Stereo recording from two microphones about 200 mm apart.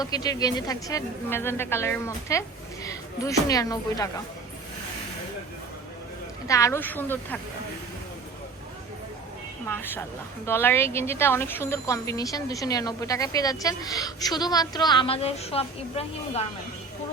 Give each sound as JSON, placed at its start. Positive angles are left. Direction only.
{"t": 0.0, "sound": "speech", "side_deg": 20}
{"t": 6.5, "sound": "speech", "side_deg": 15}
{"t": 9.6, "sound": "speech", "side_deg": 10}